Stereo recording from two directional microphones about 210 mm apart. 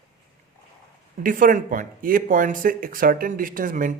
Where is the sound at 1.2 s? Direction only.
40° right (ahead or behind).